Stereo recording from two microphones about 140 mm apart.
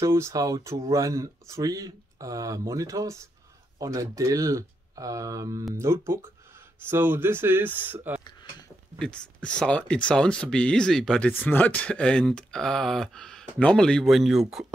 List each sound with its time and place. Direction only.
0.0 s speech: 20° right (ahead or behind)
8.9 s speech: 5° left (ahead or behind)